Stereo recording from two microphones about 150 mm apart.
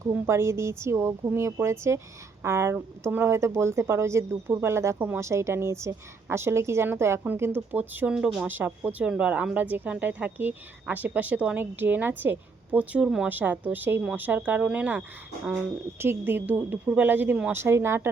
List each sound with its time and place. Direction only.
0.1 s speech: 15° right (ahead or behind)